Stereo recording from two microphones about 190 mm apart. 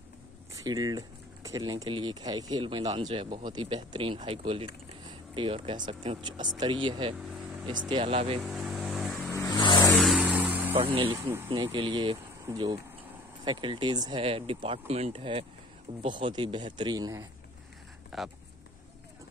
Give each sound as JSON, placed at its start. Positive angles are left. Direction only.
{"t": 0.6, "sound": "speech", "side_deg": -20}
{"t": 8.5, "sound": "vehicle", "side_deg": 0}
{"t": 9.3, "sound": "vehicle", "side_deg": 15}
{"t": 9.9, "sound": "a sound", "side_deg": -5}
{"t": 11.4, "sound": "speech", "side_deg": -25}
{"t": 18.1, "sound": "speech", "side_deg": 0}